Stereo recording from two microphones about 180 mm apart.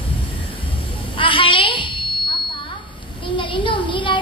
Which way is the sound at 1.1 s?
30° left (ahead or behind).